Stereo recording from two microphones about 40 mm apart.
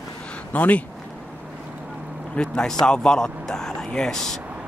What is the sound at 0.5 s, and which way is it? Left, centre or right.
Speech, left.